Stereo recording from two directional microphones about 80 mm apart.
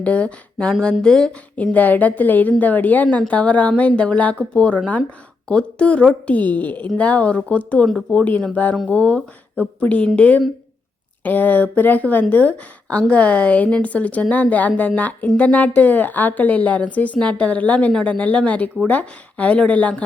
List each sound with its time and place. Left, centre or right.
0.0 s a woman's voice: centre
1.6 s a woman's voice: left